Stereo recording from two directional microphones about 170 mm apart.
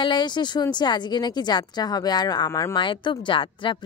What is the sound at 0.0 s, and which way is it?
Speech, 25° left (ahead or behind).